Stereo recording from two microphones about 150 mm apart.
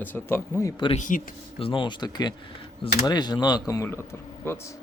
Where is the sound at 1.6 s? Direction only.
35° left (ahead or behind); by 4.6 s 15° left (ahead or behind).